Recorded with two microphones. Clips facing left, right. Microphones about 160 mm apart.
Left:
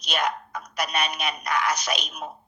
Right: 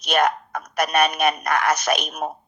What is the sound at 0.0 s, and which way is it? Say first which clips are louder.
A man's voice: right 7 dB; 50° right (ahead or behind).